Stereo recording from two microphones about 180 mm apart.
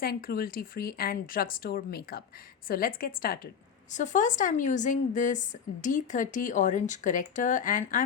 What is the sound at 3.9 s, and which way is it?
Speech, 45° left (ahead or behind).